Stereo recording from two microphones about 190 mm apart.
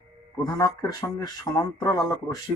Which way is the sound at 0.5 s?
20° left (ahead or behind).